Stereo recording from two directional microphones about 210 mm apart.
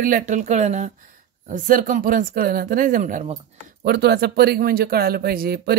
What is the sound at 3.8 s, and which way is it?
Speech, 50° right (ahead or behind).